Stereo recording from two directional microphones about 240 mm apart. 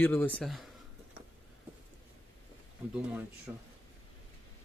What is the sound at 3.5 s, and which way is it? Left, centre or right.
Speech, centre.